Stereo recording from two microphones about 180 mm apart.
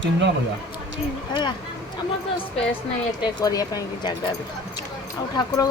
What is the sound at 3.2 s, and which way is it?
Speech, 20° left (ahead or behind).